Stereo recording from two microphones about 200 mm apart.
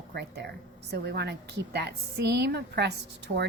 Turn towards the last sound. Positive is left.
turn(degrees=-60)  # may be behind; listen again after turning